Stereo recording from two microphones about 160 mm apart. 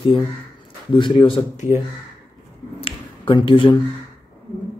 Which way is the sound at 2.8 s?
35° left (ahead or behind).